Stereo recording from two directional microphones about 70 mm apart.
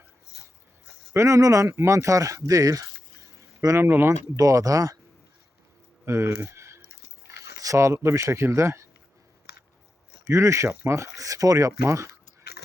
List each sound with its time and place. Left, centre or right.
1.1 s speech: right
3.8 s speech: right
4.4 s speech: right
6.1 s a sound: right
7.6 s speech: right
10.2 s speech: right